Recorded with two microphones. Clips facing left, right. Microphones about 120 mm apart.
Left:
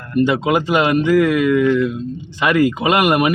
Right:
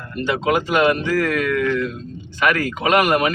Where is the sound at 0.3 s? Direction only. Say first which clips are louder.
Left 3 dB; 15° left (ahead or behind).